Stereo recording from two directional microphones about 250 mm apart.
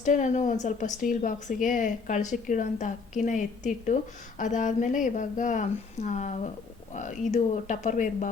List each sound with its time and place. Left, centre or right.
0.0 s a woman's voice: left